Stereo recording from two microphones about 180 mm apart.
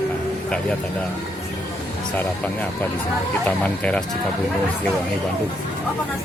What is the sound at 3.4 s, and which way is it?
Speech, 5° left (ahead or behind).